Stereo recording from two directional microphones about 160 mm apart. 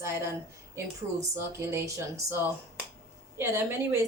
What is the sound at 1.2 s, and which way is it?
Speech, 15° right (ahead or behind).